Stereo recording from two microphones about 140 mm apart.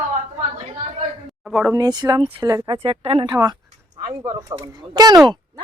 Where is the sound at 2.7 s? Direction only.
45° right (ahead or behind).